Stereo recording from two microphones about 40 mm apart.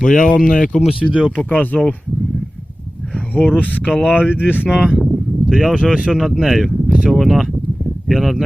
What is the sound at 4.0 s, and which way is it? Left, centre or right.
Speech, right.